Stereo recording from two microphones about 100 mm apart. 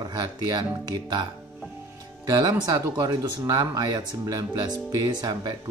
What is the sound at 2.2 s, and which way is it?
Speech, 40° right (ahead or behind).